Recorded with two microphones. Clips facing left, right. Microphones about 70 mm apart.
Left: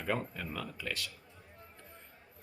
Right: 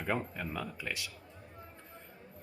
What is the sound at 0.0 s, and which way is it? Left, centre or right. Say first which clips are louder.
A man's voice: right 1 dB; centre.